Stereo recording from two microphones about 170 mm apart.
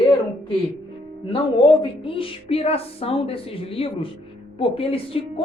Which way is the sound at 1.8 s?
30° left (ahead or behind).